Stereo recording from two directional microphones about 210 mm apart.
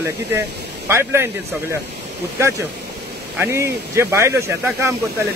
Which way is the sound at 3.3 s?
10° right (ahead or behind).